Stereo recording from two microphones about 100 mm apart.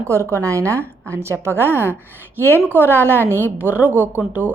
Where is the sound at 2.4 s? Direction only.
20° left (ahead or behind).